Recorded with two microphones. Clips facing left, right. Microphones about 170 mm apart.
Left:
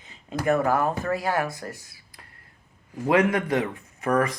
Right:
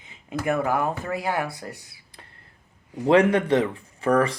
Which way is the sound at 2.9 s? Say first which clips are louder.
Right 3 dB; 25° right (ahead or behind).